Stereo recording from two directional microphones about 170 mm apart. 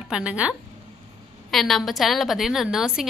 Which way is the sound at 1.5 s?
Centre (ahead or behind).